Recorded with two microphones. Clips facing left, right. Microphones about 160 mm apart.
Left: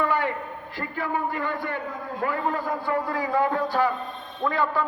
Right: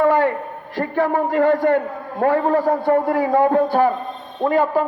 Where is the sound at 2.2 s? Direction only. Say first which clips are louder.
Right 11 dB; 70° right (ahead or behind).